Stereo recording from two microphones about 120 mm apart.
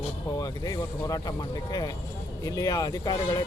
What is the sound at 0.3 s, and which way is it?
Speech, 30° left (ahead or behind).